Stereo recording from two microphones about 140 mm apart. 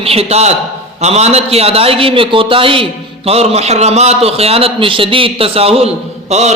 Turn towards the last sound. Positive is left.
turn(degrees=-55)  # may be behind; listen again after turning